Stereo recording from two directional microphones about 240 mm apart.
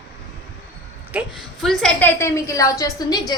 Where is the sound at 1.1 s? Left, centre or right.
Centre.